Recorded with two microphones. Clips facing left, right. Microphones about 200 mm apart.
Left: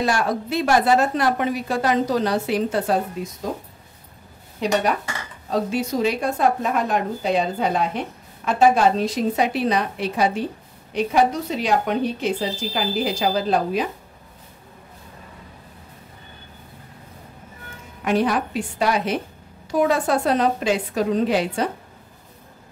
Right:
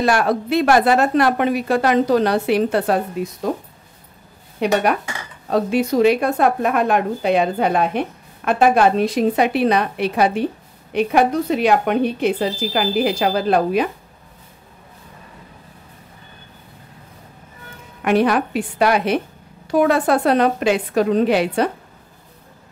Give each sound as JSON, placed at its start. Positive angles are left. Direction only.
{"t": 0.0, "sound": "speech", "side_deg": -65}
{"t": 4.6, "sound": "speech", "side_deg": -60}
{"t": 18.0, "sound": "speech", "side_deg": -65}